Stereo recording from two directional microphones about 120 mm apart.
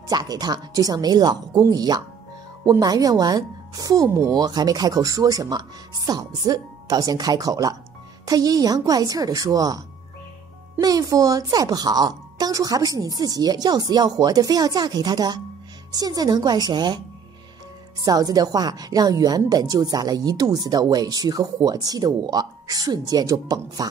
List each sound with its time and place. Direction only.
0.1 s speech: 35° right (ahead or behind)
18.0 s speech: 30° right (ahead or behind)